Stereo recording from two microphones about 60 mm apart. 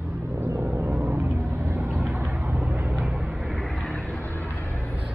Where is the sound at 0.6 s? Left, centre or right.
Right.